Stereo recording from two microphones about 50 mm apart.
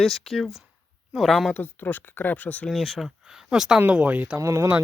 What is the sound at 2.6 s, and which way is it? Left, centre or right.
Speech, centre.